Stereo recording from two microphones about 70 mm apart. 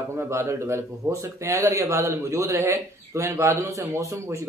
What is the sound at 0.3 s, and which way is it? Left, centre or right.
A man's voice, right.